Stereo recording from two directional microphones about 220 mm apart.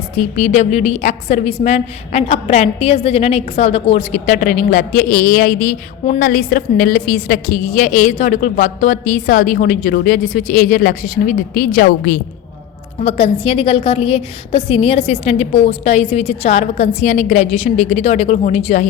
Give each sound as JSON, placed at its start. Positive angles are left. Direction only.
{"t": 0.2, "sound": "a woman's voice", "side_deg": 35}
{"t": 13.0, "sound": "a woman's voice", "side_deg": 30}